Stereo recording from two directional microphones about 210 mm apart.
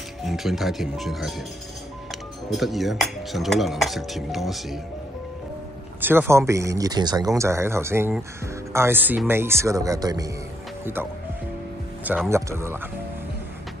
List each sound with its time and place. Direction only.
0.2 s speech: centre (ahead or behind)
2.5 s speech: centre (ahead or behind)
5.9 s speech: 10° right (ahead or behind)
12.3 s speech: 15° right (ahead or behind)